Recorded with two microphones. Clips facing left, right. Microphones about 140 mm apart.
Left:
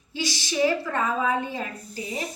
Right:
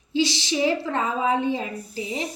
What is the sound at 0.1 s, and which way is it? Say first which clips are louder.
A woman's voice: right 6 dB; 20° right (ahead or behind).